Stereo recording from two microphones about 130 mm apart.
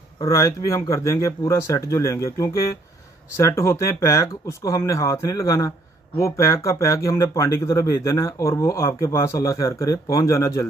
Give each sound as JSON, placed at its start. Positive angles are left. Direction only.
{"t": 0.3, "sound": "speech", "side_deg": 25}